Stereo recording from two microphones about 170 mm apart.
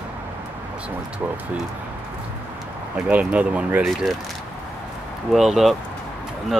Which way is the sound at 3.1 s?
10° right (ahead or behind).